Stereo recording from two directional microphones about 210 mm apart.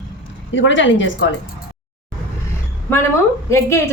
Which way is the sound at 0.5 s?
60° left (ahead or behind).